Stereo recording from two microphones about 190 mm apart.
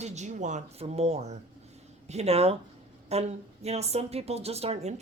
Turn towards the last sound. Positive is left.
turn(degrees=-35)  # may be behind; listen again after turning